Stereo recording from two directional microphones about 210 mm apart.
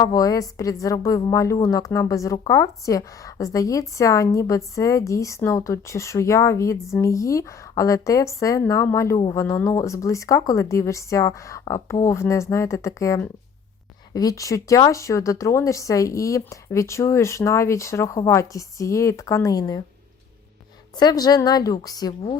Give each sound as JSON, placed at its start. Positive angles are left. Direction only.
{"t": 0.0, "sound": "a woman's voice", "side_deg": 15}
{"t": 20.9, "sound": "a woman's voice", "side_deg": 20}